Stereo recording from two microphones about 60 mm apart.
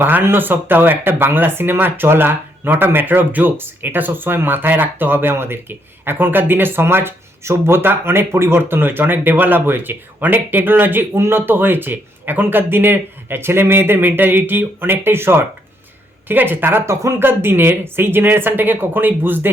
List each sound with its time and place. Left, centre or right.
0.0 s speech: right
16.8 s speech: right
17.2 s speech: right